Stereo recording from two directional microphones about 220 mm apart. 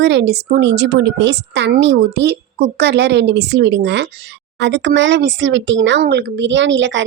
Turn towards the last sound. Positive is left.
turn(degrees=-55)  # may be behind; listen again after turning